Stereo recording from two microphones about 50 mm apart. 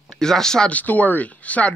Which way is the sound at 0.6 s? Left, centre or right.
Left.